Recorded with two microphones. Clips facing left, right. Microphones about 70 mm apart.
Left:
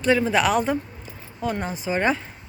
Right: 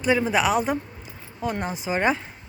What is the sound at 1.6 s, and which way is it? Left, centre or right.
Speech, centre.